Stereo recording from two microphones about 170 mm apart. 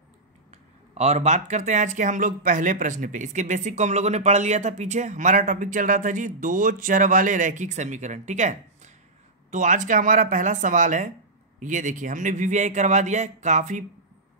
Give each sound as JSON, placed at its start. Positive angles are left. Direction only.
{"t": 0.5, "sound": "speech", "side_deg": -40}